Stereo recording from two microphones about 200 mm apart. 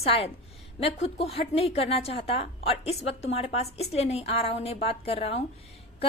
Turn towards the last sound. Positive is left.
turn(degrees=30)  # may be behind; listen again after turning